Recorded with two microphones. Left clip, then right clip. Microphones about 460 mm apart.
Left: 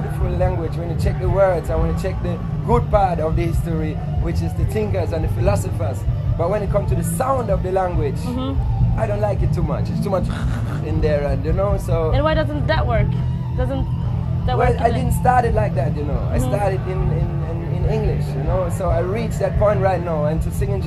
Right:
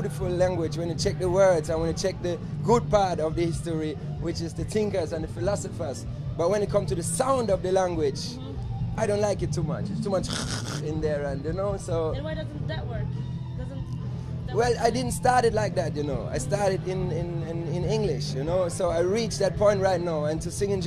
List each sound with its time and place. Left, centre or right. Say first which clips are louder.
1.0 s speech: left 3 dB; right
6.4 s speech: left 4 dB; right
9.7 s speech: left 8 dB; centre
12.1 s speech: left 14 dB; left
14.6 s speech: left 4 dB; right
18.8 s speech: left 3 dB; right